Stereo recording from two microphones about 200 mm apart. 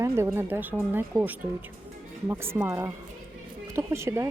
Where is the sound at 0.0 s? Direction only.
15° right (ahead or behind).